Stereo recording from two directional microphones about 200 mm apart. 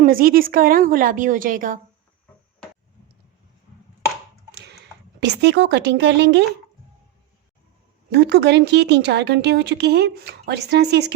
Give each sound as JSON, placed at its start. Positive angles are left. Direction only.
{"t": 0.0, "sound": "a woman's voice", "side_deg": -45}
{"t": 5.2, "sound": "speech", "side_deg": -60}
{"t": 8.1, "sound": "speech", "side_deg": -60}